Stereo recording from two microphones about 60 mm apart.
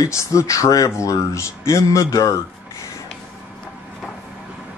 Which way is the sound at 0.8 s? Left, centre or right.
Left.